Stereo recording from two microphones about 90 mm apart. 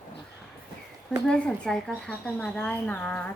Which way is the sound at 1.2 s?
10° left (ahead or behind).